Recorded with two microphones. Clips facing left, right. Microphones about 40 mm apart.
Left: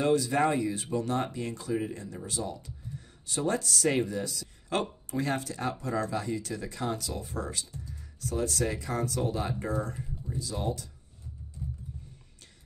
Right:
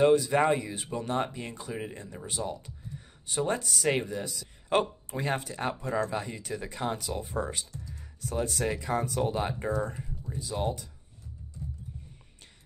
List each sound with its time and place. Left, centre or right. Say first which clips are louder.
0.0 s speech: right 3 dB; centre
9.8 s speech: right 1 dB; centre
10.3 s speech: right 2 dB; right